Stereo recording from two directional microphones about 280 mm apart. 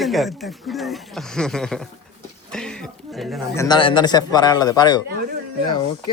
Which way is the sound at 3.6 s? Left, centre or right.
Centre.